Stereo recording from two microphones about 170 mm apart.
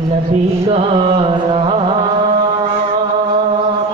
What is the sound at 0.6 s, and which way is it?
Music, 35° right (ahead or behind).